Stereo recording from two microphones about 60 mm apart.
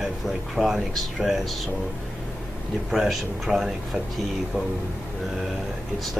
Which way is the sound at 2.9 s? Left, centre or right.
Centre.